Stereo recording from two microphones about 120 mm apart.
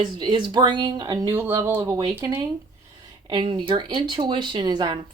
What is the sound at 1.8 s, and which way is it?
Speech, 35° right (ahead or behind).